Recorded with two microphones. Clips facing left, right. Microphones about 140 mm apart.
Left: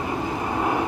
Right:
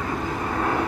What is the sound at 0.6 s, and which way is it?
Vehicle, 15° left (ahead or behind).